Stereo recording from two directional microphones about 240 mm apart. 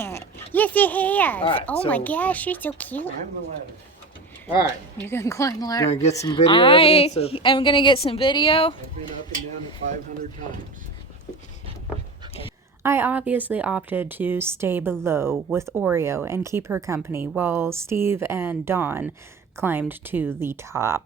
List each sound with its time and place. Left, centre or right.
0.0 s a sound: centre
1.5 s a child's voice: centre
5.0 s a child's voice: centre
5.9 s a woman's voice: left
9.8 s speech: right
12.8 s speech: centre